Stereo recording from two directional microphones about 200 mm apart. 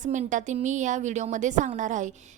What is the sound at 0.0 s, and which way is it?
A woman's voice, 40° right (ahead or behind).